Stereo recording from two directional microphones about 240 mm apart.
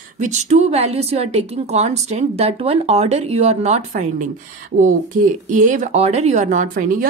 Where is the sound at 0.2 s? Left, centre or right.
Right.